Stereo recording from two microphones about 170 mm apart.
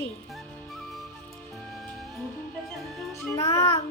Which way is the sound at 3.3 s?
15° left (ahead or behind).